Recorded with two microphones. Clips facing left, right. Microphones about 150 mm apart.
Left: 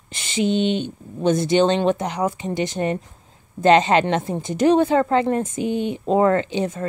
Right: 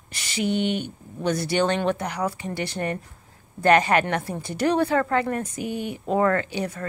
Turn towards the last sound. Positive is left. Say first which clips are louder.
# left 5 dB
turn(degrees=20)  # may be behind; listen again after turning